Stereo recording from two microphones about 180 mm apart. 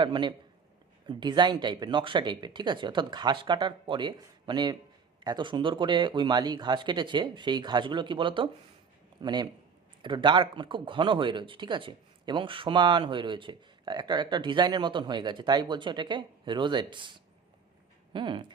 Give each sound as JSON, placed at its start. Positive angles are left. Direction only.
{"t": 0.0, "sound": "speech", "side_deg": -25}